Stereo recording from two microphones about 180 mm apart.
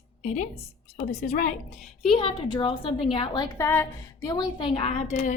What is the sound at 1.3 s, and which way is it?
Speech, 45° left (ahead or behind).